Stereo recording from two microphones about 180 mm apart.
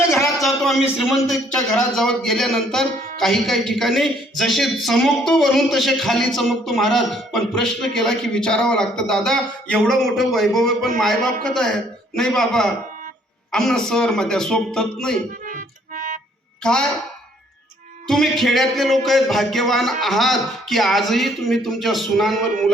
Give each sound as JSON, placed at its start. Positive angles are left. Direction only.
{"t": 0.3, "sound": "a man's voice", "side_deg": 0}
{"t": 15.4, "sound": "music", "side_deg": -50}
{"t": 18.1, "sound": "a man's voice", "side_deg": 0}